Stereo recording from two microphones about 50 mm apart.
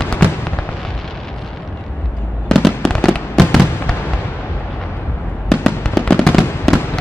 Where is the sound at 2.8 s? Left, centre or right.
Centre.